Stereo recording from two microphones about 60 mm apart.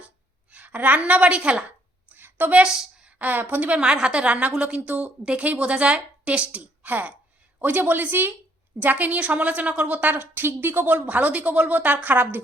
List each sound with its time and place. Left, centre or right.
0.5 s a woman's voice: right
2.0 s a sound: right
2.5 s a woman's voice: right